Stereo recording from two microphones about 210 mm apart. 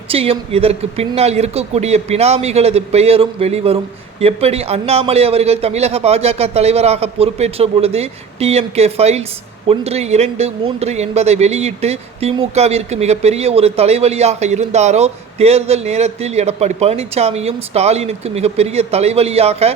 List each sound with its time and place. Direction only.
0.1 s a man's voice: 30° right (ahead or behind)